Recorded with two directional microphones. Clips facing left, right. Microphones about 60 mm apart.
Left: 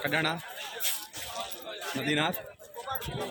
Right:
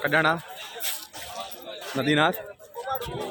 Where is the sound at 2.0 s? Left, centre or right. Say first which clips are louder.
Right 8 dB; right.